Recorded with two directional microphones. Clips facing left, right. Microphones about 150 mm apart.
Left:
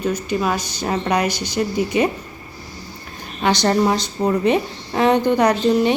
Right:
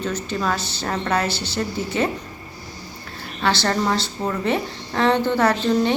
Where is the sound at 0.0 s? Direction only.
10° left (ahead or behind).